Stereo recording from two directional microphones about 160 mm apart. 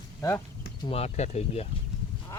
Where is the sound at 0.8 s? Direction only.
40° left (ahead or behind).